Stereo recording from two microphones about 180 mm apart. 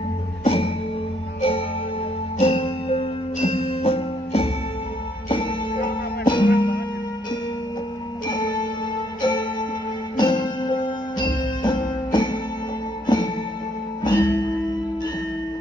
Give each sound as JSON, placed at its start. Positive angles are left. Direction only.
{"t": 0.4, "sound": "music", "side_deg": 30}
{"t": 2.3, "sound": "music", "side_deg": 30}
{"t": 8.3, "sound": "music", "side_deg": 25}